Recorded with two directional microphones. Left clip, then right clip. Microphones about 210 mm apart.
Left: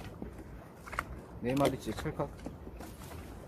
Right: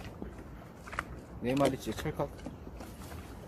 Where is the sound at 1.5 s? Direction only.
15° left (ahead or behind).